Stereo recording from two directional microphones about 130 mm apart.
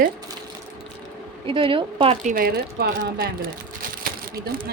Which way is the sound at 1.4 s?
40° right (ahead or behind).